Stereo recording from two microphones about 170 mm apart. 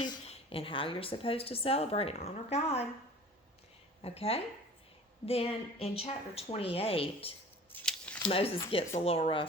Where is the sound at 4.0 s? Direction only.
35° left (ahead or behind).